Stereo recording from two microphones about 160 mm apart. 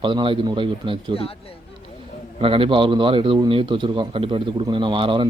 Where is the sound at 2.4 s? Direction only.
35° right (ahead or behind).